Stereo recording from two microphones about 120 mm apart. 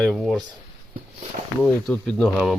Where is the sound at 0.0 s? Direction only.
5° left (ahead or behind).